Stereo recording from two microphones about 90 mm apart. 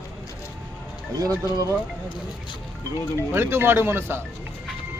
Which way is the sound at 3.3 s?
25° right (ahead or behind).